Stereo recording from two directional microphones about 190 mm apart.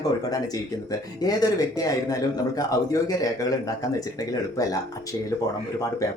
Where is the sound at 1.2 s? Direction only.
20° left (ahead or behind).